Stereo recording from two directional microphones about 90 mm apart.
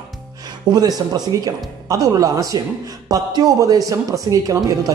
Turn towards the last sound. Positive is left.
turn(degrees=-40)  # may be behind; listen again after turning